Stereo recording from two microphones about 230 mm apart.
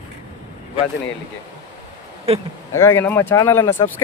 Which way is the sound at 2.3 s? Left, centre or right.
Right.